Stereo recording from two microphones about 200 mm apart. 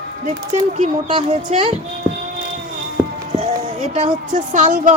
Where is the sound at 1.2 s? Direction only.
35° right (ahead or behind).